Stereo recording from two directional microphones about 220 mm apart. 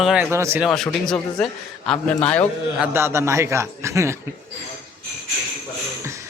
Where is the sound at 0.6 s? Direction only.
Centre (ahead or behind).